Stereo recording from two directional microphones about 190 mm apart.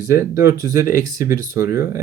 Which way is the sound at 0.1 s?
15° right (ahead or behind).